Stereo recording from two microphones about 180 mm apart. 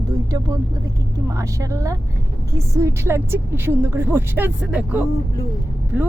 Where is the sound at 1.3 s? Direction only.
15° right (ahead or behind).